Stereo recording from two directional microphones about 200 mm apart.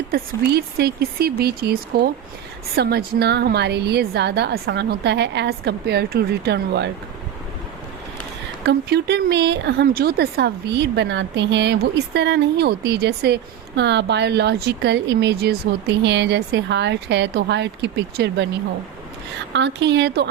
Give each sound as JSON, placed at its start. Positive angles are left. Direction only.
{"t": 0.1, "sound": "speech", "side_deg": -55}
{"t": 8.6, "sound": "speech", "side_deg": -55}
{"t": 19.5, "sound": "speech", "side_deg": -60}